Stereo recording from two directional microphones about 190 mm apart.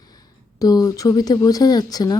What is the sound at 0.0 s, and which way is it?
Speech, 20° left (ahead or behind).